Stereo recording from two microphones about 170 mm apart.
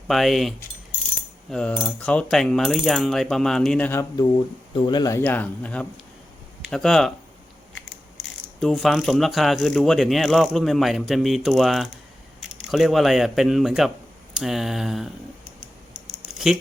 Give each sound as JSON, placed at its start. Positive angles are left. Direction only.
{"t": 0.1, "sound": "speech", "side_deg": 0}
{"t": 4.7, "sound": "speech", "side_deg": 25}
{"t": 5.2, "sound": "speech", "side_deg": 10}
{"t": 8.2, "sound": "speech", "side_deg": 0}